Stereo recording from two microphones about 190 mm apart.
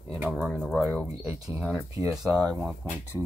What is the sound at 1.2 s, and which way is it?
Speech, 15° right (ahead or behind).